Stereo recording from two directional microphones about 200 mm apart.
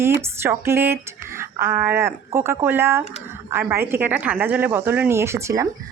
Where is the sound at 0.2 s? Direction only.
10° right (ahead or behind).